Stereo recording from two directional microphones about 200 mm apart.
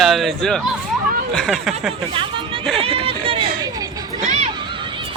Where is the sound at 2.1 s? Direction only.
25° right (ahead or behind).